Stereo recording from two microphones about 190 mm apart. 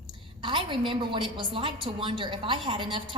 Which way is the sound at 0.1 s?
25° right (ahead or behind).